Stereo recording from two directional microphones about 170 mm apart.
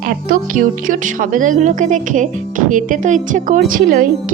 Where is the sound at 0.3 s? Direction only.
55° right (ahead or behind).